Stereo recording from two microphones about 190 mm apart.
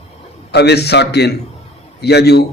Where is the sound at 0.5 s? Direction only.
60° left (ahead or behind).